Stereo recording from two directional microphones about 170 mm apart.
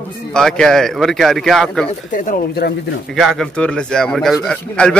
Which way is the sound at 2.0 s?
50° left (ahead or behind).